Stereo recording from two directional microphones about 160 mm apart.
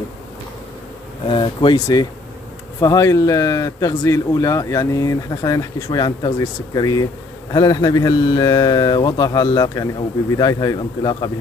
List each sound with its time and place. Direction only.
1.2 s speech: 35° left (ahead or behind)
2.8 s speech: 20° left (ahead or behind)